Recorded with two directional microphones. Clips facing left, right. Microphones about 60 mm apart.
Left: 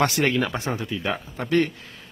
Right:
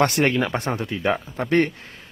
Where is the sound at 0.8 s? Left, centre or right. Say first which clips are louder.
Right 2 dB; right.